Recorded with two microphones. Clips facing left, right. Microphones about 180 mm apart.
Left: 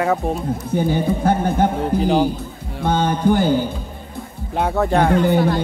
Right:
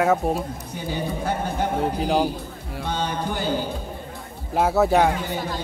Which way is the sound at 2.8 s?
50° left (ahead or behind).